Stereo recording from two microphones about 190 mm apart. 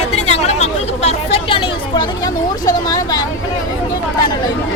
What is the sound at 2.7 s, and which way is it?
Speech, 20° left (ahead or behind).